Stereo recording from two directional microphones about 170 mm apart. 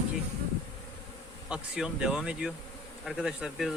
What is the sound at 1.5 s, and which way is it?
Speech, 5° right (ahead or behind).